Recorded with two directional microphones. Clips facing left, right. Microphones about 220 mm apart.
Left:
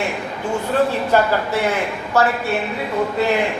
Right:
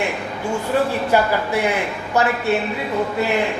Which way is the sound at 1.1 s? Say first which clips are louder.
Left 1 dB; 10° right (ahead or behind).